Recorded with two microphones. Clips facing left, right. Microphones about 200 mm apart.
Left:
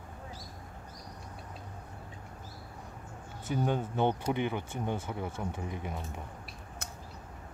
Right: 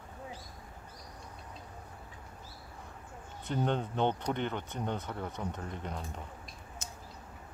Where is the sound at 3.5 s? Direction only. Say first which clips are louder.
Left 1 dB; 5° left (ahead or behind).